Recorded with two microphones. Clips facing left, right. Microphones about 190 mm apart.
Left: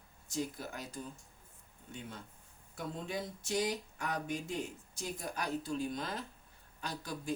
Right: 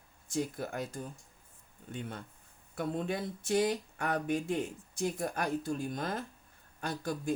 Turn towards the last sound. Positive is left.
turn(degrees=-55)  # may be behind; listen again after turning